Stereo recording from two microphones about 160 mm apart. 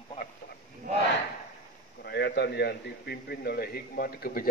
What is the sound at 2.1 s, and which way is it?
A man's voice, 90° left.